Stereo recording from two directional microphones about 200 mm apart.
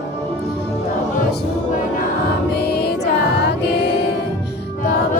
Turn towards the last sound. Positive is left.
turn(degrees=55)  # may be behind; listen again after turning